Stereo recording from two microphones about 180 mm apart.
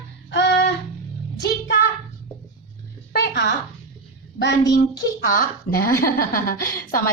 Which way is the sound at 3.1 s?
70° left (ahead or behind).